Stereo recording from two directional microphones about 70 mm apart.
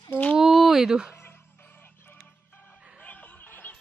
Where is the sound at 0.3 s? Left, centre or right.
Centre.